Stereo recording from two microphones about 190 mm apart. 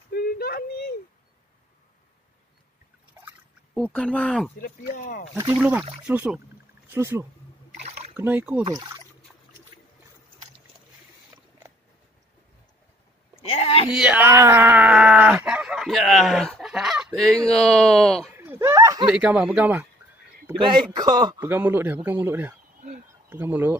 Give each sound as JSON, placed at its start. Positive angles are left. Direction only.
{"t": 0.1, "sound": "a sound", "side_deg": 55}
{"t": 3.7, "sound": "speech", "side_deg": 5}
{"t": 4.6, "sound": "speech", "side_deg": 50}
{"t": 5.3, "sound": "a man's voice", "side_deg": -15}
{"t": 8.6, "sound": "speech", "side_deg": -20}
{"t": 11.3, "sound": "a sound", "side_deg": -15}
{"t": 13.5, "sound": "a sound", "side_deg": 30}
{"t": 13.9, "sound": "speech", "side_deg": -5}
{"t": 18.3, "sound": "a sound", "side_deg": -10}
{"t": 19.0, "sound": "speech", "side_deg": -5}
{"t": 20.6, "sound": "speech", "side_deg": -25}
{"t": 21.5, "sound": "a man's voice", "side_deg": -10}